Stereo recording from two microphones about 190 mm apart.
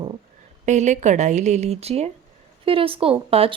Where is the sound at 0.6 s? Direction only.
40° right (ahead or behind).